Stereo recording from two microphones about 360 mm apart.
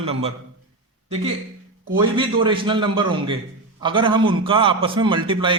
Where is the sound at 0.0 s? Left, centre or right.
Centre.